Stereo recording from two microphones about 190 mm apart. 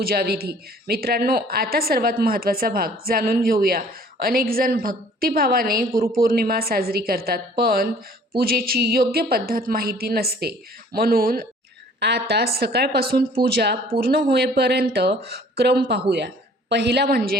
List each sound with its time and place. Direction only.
0.0 s a woman's voice: 55° right (ahead or behind)